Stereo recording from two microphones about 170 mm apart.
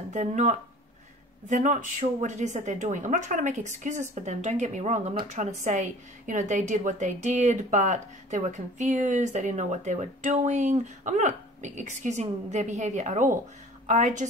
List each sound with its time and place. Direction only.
0.1 s a woman's voice: 45° right (ahead or behind)